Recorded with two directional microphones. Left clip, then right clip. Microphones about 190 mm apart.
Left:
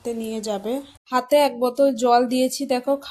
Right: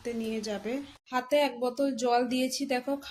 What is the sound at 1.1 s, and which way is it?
Speech, 45° left (ahead or behind).